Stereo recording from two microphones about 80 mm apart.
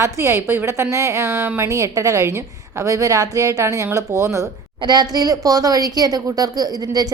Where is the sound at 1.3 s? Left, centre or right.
Right.